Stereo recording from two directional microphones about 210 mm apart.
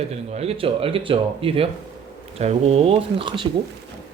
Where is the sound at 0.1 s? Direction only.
30° right (ahead or behind).